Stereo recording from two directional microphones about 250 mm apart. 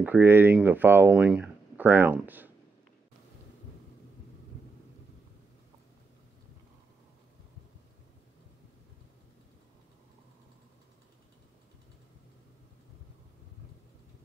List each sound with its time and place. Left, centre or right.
0.0 s speech: centre